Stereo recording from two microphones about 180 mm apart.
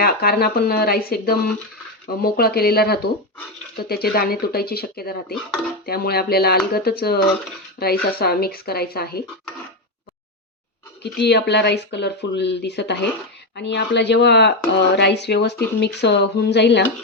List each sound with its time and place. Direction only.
0.0 s speech: 60° left (ahead or behind)
11.0 s speech: 70° left (ahead or behind)